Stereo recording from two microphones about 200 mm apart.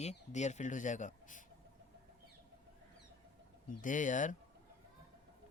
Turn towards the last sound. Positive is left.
turn(degrees=40)  # may be behind; listen again after turning